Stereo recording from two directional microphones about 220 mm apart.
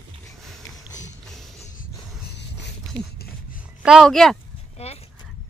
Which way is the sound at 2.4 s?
50° left (ahead or behind).